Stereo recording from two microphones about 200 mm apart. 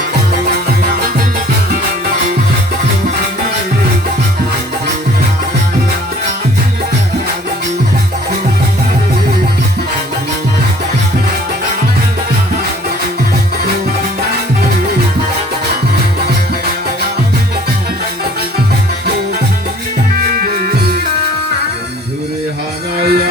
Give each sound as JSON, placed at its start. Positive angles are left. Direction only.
{"t": 20.1, "sound": "music", "side_deg": -45}
{"t": 23.0, "sound": "music", "side_deg": -50}